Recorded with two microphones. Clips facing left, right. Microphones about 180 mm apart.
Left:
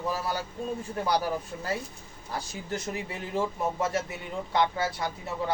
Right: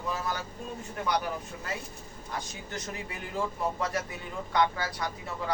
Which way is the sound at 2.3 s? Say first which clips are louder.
Left 4 dB; 25° left (ahead or behind).